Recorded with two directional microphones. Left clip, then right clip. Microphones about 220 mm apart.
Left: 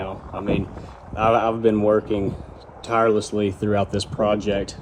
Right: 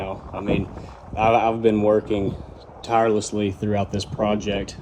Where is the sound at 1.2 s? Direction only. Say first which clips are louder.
Even; 15° left (ahead or behind).